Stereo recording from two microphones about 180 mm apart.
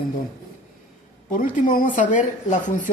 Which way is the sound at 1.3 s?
50° left (ahead or behind).